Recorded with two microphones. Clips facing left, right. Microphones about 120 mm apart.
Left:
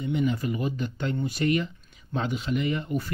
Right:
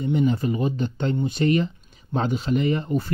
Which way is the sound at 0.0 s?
35° right (ahead or behind).